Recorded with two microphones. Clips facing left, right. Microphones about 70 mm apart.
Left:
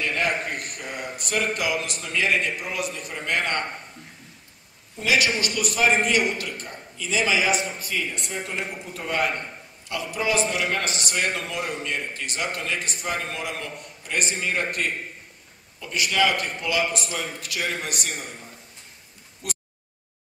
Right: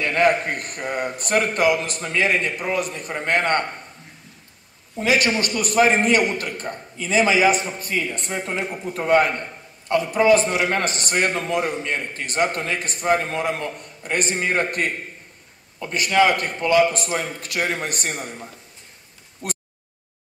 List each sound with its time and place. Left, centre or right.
0.0 s a man's voice: right
4.9 s a man's voice: right
19.4 s a sound: right